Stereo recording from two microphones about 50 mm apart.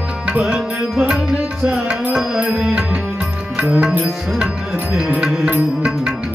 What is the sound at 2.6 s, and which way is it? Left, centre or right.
Music, centre.